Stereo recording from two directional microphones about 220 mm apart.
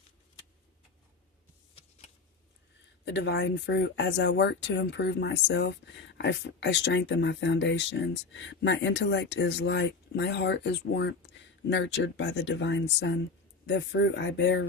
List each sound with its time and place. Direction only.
3.0 s speech: 50° left (ahead or behind)